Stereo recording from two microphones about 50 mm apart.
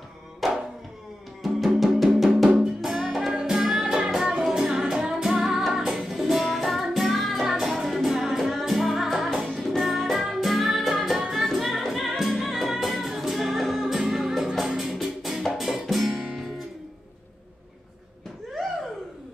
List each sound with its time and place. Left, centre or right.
0.4 s music: centre
2.6 s music: centre